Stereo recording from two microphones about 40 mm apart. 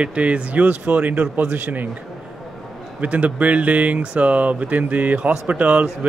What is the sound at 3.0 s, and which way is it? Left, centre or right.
Speech, right.